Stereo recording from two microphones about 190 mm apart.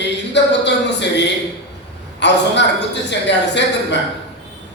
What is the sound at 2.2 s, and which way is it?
A woman's voice, 65° left (ahead or behind).